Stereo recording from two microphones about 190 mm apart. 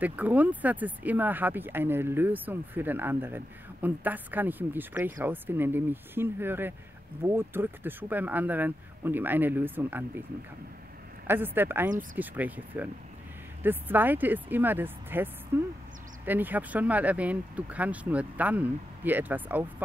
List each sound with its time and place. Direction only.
0.0 s speech: 10° right (ahead or behind)
11.2 s speech: 10° right (ahead or behind)